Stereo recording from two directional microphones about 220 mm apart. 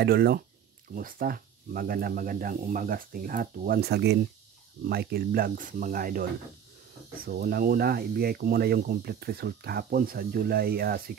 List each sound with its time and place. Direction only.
0.0 s speech: 45° right (ahead or behind)
7.2 s speech: 45° right (ahead or behind)